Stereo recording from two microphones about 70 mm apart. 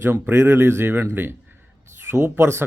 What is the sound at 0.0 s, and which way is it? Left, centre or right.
Speech, right.